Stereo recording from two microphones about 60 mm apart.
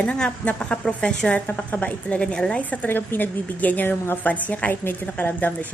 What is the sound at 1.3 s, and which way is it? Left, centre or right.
A woman's voice, left.